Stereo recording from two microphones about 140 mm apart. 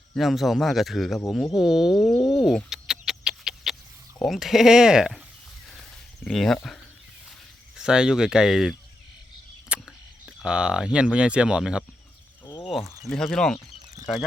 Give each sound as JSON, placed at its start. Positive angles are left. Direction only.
{"t": 0.1, "sound": "speech", "side_deg": 0}
{"t": 2.6, "sound": "a sound", "side_deg": -5}
{"t": 4.2, "sound": "speech", "side_deg": 0}
{"t": 6.2, "sound": "speech", "side_deg": 0}
{"t": 7.8, "sound": "speech", "side_deg": -5}
{"t": 9.7, "sound": "a sound", "side_deg": -10}
{"t": 10.2, "sound": "speech", "side_deg": -5}
{"t": 12.5, "sound": "a sound", "side_deg": 30}
{"t": 12.7, "sound": "speech", "side_deg": 0}